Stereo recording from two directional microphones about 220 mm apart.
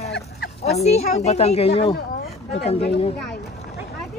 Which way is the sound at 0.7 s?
30° left (ahead or behind).